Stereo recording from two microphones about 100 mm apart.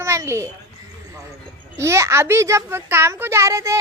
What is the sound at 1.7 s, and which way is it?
A child's voice, 30° right (ahead or behind).